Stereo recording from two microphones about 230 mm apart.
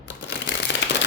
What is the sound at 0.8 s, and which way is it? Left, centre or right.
Firecracker, left.